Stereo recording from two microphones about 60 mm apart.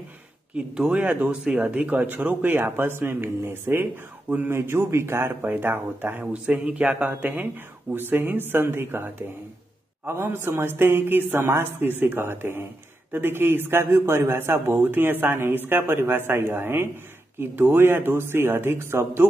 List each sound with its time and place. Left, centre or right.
0.6 s speech: centre
0.9 s speech: right
1.4 s speech: centre; by 4.5 s right
4.5 s a man's voice: right
5.5 s a man's voice: right